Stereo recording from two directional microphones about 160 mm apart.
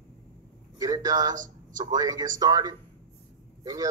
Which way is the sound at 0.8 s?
25° right (ahead or behind).